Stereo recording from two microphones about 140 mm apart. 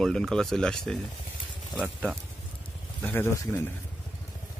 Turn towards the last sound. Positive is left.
turn(degrees=15)  # may be behind; listen again after turning